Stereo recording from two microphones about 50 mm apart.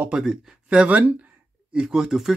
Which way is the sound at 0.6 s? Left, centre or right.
Right.